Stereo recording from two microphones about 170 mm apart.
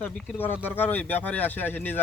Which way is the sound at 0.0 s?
10° left (ahead or behind).